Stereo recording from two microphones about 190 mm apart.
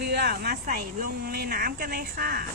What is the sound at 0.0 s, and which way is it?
Speech, 60° right (ahead or behind).